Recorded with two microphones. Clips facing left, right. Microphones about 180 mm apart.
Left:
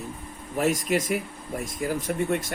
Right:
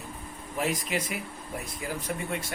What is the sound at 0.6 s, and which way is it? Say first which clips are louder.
Speech: left 6 dB; 45° left (ahead or behind).